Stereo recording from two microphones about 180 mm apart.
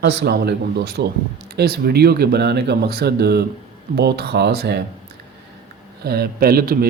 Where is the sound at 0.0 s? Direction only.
65° right (ahead or behind).